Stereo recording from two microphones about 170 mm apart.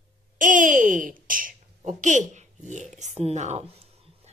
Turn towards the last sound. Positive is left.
turn(degrees=-40)  # may be behind; listen again after turning